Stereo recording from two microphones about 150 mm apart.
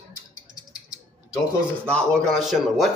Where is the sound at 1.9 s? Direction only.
5° left (ahead or behind).